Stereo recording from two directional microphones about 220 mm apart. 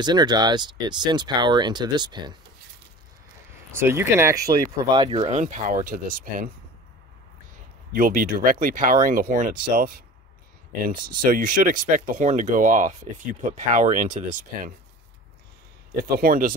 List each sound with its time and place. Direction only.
0.0 s speech: 20° right (ahead or behind)
3.7 s speech: 10° right (ahead or behind); by 6.5 s 40° right (ahead or behind)
7.9 s speech: 40° right (ahead or behind)
16.0 s speech: 40° right (ahead or behind)